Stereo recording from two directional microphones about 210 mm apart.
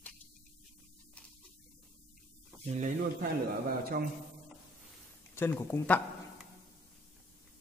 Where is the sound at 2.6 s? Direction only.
35° right (ahead or behind).